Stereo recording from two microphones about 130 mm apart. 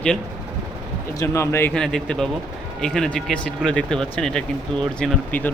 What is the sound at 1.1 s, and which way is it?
Speech, 20° left (ahead or behind).